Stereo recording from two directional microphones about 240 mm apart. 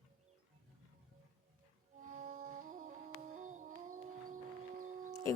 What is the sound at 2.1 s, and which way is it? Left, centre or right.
Music, right.